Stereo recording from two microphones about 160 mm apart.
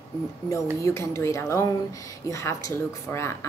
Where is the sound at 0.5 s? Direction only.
20° left (ahead or behind).